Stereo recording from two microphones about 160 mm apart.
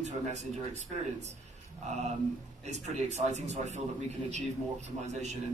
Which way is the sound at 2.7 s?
45° right (ahead or behind).